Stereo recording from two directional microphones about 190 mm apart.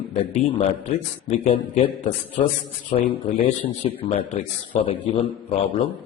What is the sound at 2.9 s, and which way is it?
A man's voice, 35° left (ahead or behind).